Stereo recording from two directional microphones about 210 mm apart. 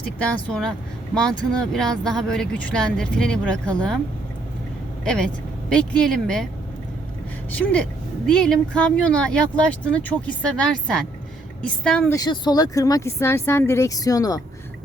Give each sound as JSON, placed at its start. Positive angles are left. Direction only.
{"t": 0.3, "sound": "speech", "side_deg": 5}
{"t": 5.0, "sound": "speech", "side_deg": 5}
{"t": 7.5, "sound": "speech", "side_deg": 5}
{"t": 12.1, "sound": "speech", "side_deg": 20}